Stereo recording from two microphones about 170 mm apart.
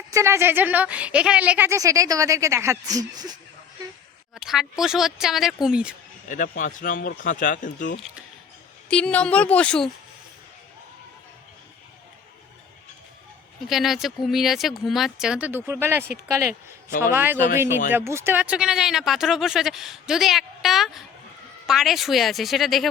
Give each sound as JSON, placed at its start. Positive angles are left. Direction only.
{"t": 0.1, "sound": "speech", "side_deg": -15}
{"t": 4.4, "sound": "speech", "side_deg": 0}
{"t": 6.2, "sound": "a man's voice", "side_deg": 50}
{"t": 8.9, "sound": "speech", "side_deg": 5}
{"t": 13.7, "sound": "speech", "side_deg": 0}
{"t": 17.1, "sound": "speech", "side_deg": -10}